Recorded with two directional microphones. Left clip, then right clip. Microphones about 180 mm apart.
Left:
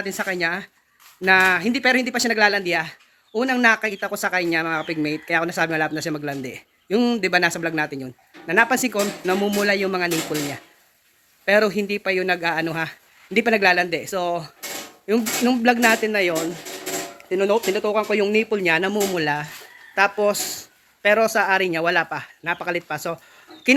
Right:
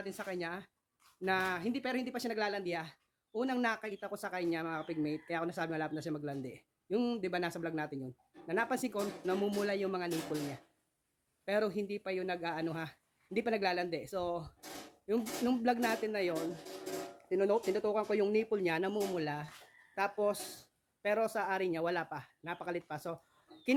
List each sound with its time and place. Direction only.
0.0 s speech: 5° left (ahead or behind)
17.2 s speech: 15° right (ahead or behind)